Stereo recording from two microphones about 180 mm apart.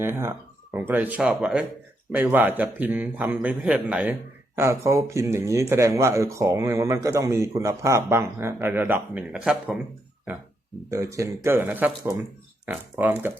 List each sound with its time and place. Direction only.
0.0 s speech: 15° right (ahead or behind)
10.8 s speech: 15° right (ahead or behind)